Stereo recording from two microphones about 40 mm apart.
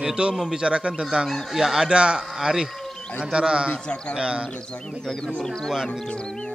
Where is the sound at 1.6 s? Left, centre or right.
Centre.